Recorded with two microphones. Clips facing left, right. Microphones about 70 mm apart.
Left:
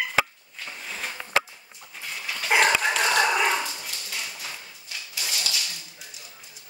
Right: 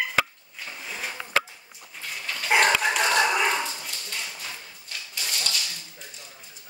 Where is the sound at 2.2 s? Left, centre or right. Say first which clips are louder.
Even; centre.